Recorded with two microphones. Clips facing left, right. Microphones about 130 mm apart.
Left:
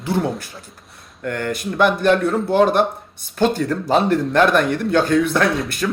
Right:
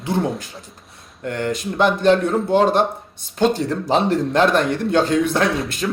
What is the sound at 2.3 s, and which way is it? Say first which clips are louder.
Speech: even; centre (ahead or behind).